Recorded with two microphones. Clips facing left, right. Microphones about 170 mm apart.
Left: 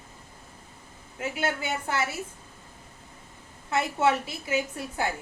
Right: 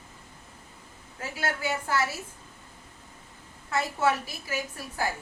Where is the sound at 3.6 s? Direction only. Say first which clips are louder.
Left 2 dB; 25° left (ahead or behind).